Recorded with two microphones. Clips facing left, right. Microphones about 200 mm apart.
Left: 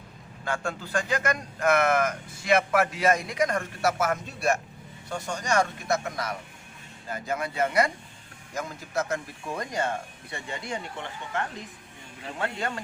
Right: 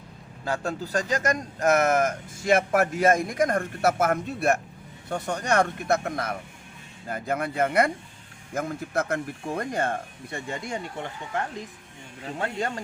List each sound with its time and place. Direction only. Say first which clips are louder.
0.4 s speech: right 2 dB; 35° right (ahead or behind)
12.4 s speech: right 2 dB; 40° right (ahead or behind)